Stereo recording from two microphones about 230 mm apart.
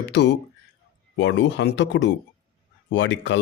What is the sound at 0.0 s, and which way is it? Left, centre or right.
Speech, left.